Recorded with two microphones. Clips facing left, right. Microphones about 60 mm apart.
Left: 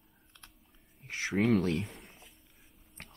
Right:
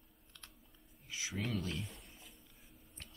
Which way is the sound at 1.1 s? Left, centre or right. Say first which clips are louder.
Left 12 dB; left.